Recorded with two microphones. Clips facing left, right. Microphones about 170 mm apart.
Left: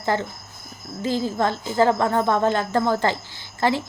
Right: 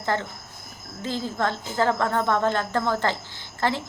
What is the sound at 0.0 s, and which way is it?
A woman's voice, 15° left (ahead or behind).